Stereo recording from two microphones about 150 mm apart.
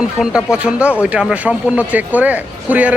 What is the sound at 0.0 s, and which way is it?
Speech, 5° right (ahead or behind).